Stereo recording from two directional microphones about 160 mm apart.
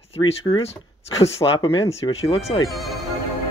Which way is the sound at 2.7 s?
Centre (ahead or behind).